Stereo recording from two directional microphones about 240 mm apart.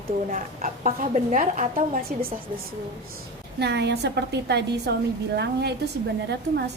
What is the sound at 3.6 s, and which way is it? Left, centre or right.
A woman's voice, right.